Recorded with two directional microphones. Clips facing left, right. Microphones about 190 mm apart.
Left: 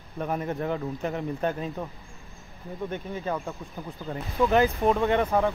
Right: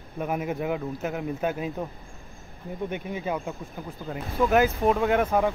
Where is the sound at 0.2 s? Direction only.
10° right (ahead or behind).